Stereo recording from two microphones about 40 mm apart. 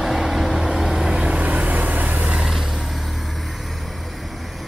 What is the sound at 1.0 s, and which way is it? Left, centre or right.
Vehicle, right.